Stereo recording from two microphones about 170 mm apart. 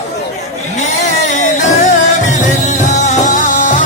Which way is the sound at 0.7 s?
45° left (ahead or behind).